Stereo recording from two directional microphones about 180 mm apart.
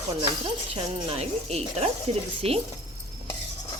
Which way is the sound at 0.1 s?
30° right (ahead or behind).